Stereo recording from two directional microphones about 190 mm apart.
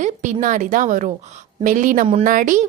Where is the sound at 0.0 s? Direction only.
40° right (ahead or behind).